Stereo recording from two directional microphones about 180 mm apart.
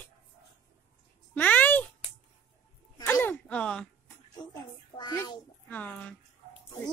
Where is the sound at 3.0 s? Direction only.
10° left (ahead or behind).